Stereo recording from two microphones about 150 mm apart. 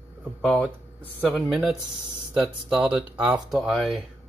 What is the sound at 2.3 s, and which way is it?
Speech, 5° right (ahead or behind).